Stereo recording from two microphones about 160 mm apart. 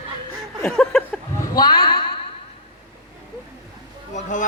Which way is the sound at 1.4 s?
25° left (ahead or behind).